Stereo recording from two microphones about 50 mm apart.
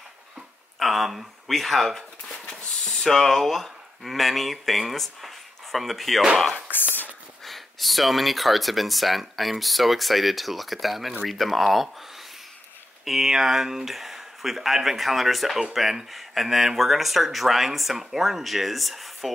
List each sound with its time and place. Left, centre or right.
0.7 s speech: centre
6.7 s a sound: left
7.4 s speech: centre
13.0 s speech: centre